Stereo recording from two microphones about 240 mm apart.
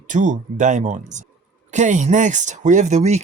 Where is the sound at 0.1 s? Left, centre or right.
Right.